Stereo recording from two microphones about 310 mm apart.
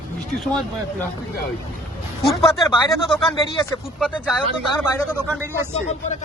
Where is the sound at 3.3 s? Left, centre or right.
Centre.